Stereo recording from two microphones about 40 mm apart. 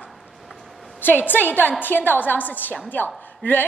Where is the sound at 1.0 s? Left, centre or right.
Left.